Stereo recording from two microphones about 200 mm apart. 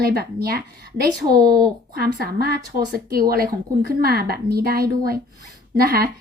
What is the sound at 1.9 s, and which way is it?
A woman's voice, 50° right (ahead or behind).